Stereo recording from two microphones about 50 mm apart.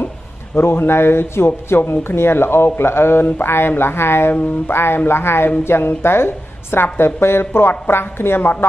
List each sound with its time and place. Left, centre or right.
0.6 s a man's voice: left